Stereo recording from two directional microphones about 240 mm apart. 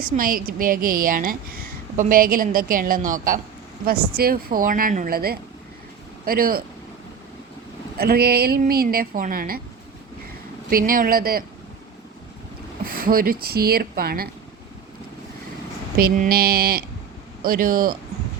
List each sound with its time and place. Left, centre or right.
0.0 s a woman's voice: right
7.9 s a woman's voice: right
10.7 s a woman's voice: right
12.8 s a sound: right
13.4 s a woman's voice: right
16.0 s a woman's voice: right